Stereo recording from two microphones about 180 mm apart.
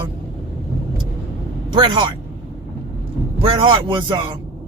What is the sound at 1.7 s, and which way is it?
Speech, 25° right (ahead or behind).